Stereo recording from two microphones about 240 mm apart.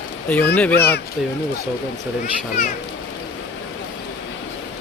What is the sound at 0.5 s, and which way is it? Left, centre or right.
Speech, centre.